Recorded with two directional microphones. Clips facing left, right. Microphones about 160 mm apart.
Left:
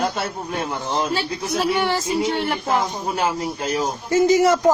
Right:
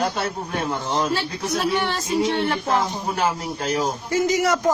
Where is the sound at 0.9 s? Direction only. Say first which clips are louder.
Left 1 dB; 10° left (ahead or behind).